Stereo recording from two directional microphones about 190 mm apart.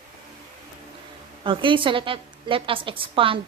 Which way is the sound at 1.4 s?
25° right (ahead or behind).